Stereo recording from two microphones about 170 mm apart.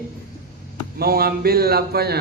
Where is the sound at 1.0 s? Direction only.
65° right (ahead or behind).